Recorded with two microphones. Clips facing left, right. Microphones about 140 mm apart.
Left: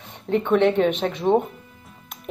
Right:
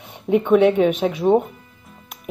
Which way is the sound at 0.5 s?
5° right (ahead or behind).